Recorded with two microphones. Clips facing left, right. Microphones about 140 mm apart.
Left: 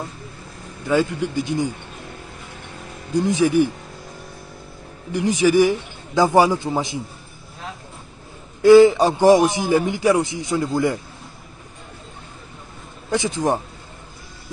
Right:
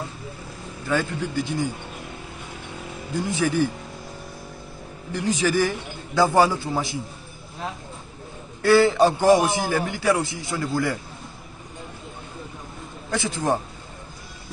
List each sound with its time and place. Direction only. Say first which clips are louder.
0.8 s a man's voice: left 5 dB; 15° left (ahead or behind)
3.1 s a man's voice: left 6 dB; 15° left (ahead or behind)
5.1 s a man's voice: left 6 dB; 15° left (ahead or behind)
8.6 s a man's voice: left 6 dB; 15° left (ahead or behind)
13.1 s a man's voice: left 3 dB; 15° left (ahead or behind)